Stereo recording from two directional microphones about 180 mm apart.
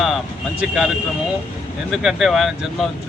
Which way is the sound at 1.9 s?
Centre (ahead or behind).